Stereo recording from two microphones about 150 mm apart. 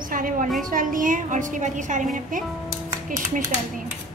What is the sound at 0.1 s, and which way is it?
A woman's voice, 65° right (ahead or behind).